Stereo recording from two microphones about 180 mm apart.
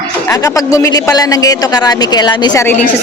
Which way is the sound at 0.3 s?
20° left (ahead or behind).